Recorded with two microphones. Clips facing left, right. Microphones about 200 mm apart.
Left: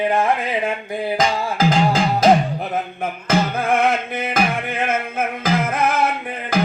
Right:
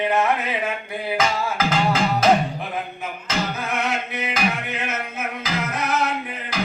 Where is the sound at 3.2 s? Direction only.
55° left (ahead or behind).